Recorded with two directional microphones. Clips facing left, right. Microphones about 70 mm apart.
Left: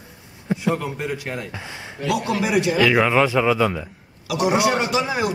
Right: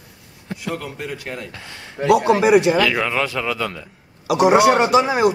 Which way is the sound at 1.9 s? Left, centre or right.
Right.